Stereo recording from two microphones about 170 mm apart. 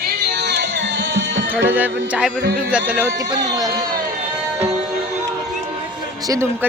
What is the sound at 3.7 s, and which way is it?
Speech, 60° right (ahead or behind).